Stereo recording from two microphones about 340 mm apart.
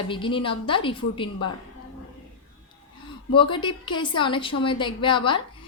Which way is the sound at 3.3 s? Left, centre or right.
Centre.